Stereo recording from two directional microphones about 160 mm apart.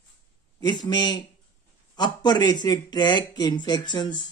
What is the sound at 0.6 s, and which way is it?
Speech, 25° left (ahead or behind).